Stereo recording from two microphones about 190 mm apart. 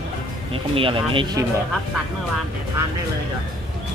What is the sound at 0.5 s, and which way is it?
Speech, 30° right (ahead or behind).